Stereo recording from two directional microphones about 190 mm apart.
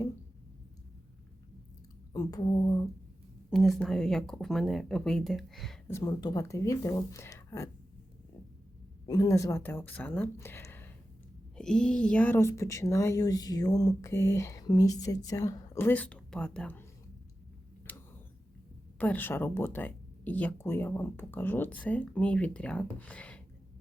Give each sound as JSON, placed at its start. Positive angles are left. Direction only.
{"t": 2.1, "sound": "a sound", "side_deg": 20}
{"t": 3.5, "sound": "speech", "side_deg": 0}
{"t": 5.9, "sound": "speech", "side_deg": 20}
{"t": 9.0, "sound": "speech", "side_deg": 20}
{"t": 17.9, "sound": "creak", "side_deg": 10}
{"t": 18.9, "sound": "speech", "side_deg": 10}